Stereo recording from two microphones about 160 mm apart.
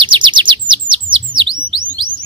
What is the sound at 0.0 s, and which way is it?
Chirp, 30° right (ahead or behind).